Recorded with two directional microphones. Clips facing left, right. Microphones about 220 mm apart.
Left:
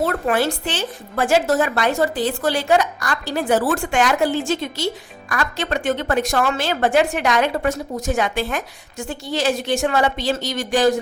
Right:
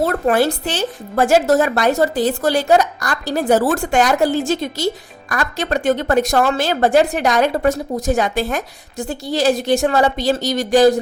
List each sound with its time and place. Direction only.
0.0 s a woman's voice: 40° right (ahead or behind)